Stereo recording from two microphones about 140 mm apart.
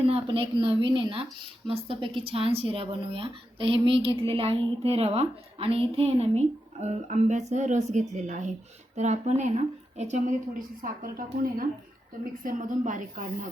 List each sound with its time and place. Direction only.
0.0 s speech: 45° right (ahead or behind)
10.8 s a woman's voice: 85° right
12.2 s a woman's voice: 75° right (ahead or behind)